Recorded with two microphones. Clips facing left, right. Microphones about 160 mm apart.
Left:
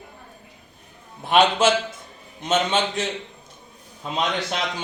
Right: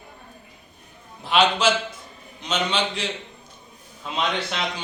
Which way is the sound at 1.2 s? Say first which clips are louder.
Left 2 dB; 50° left (ahead or behind).